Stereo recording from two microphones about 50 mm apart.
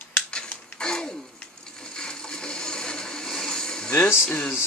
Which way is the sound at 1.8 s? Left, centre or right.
Centre.